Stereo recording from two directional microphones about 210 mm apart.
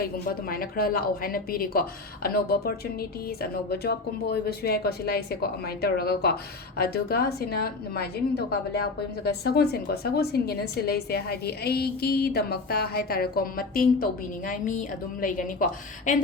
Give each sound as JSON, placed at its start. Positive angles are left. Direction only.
{"t": 0.0, "sound": "a woman's voice", "side_deg": 45}